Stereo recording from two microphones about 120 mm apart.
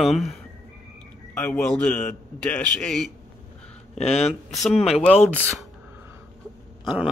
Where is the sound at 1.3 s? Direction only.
10° left (ahead or behind).